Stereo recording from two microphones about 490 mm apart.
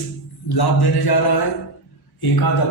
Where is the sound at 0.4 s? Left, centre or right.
Left.